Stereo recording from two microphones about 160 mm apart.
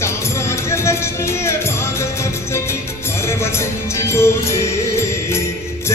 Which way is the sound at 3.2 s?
15° left (ahead or behind).